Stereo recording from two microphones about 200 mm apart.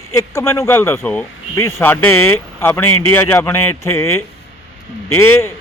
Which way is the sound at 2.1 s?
90° left.